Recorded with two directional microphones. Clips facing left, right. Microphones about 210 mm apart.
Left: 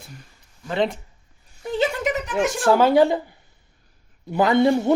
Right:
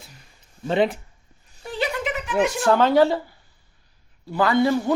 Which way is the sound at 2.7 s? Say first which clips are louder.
Left 2 dB; 10° left (ahead or behind).